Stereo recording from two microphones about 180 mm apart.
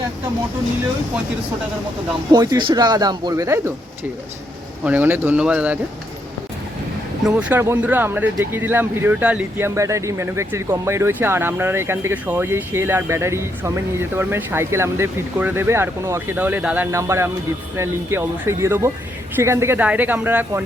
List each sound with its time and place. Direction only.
2.3 s speech: 20° right (ahead or behind)
4.8 s speech: 10° right (ahead or behind)
7.3 s speech: 5° right (ahead or behind)